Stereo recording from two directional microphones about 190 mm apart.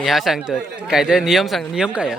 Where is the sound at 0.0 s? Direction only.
Centre (ahead or behind).